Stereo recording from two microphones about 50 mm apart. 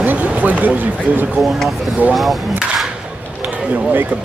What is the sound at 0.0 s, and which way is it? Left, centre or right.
Speech, right.